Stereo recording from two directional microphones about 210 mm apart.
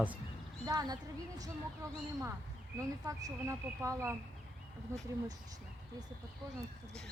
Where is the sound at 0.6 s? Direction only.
20° right (ahead or behind).